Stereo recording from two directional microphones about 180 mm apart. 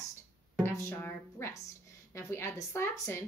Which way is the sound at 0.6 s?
15° left (ahead or behind).